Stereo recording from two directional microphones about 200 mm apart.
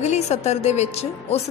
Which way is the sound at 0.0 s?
35° left (ahead or behind).